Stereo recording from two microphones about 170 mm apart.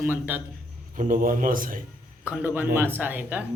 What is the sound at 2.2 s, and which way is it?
A man's voice, 10° right (ahead or behind).